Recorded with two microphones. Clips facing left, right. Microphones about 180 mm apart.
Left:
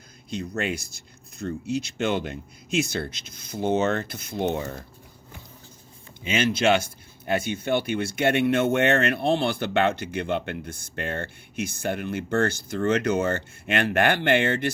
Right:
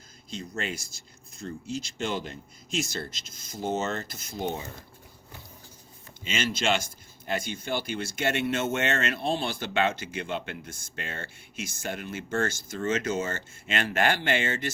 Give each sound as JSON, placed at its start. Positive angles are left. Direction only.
{"t": 0.3, "sound": "speech", "side_deg": 60}
{"t": 6.3, "sound": "speech", "side_deg": 60}